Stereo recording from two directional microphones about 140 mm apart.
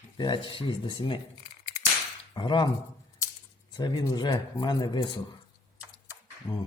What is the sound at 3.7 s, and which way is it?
Speech, 30° left (ahead or behind).